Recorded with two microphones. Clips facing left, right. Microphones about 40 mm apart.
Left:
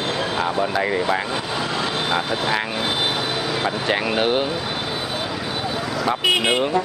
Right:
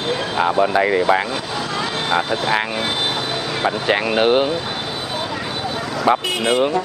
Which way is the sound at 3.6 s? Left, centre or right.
Centre.